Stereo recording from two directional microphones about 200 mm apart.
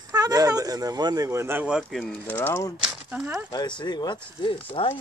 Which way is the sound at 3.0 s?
5° right (ahead or behind).